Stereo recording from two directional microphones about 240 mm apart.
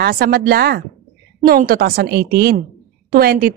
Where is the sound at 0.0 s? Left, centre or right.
Right.